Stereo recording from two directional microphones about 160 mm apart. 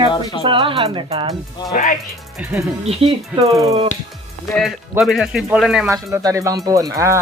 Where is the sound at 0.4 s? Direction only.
35° right (ahead or behind).